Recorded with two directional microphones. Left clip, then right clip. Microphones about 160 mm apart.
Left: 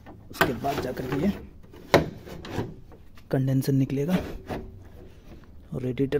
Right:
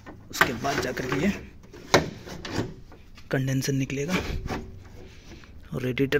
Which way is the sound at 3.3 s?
30° left (ahead or behind).